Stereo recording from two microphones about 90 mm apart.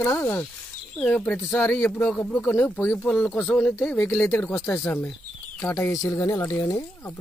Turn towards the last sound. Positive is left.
turn(degrees=30)  # may be behind; listen again after turning